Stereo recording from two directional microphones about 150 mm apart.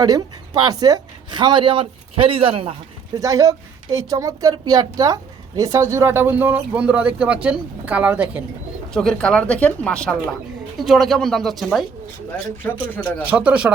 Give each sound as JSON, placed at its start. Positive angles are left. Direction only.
{"t": 0.0, "sound": "speech", "side_deg": -25}
{"t": 3.2, "sound": "a woman's voice", "side_deg": -20}
{"t": 8.9, "sound": "a woman's voice", "side_deg": 5}
{"t": 12.6, "sound": "speech", "side_deg": 15}
{"t": 13.2, "sound": "a woman's voice", "side_deg": -10}